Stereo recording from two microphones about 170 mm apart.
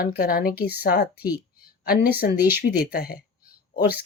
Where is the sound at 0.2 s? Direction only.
60° left (ahead or behind).